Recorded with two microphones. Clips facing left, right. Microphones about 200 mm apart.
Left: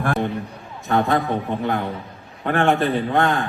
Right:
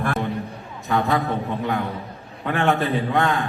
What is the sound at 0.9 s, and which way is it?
Speech, 50° left (ahead or behind).